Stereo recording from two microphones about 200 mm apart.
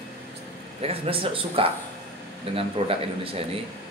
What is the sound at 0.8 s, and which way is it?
A man's voice, 30° right (ahead or behind).